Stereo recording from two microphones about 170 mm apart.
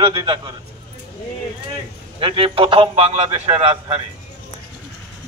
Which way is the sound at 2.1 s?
30° right (ahead or behind).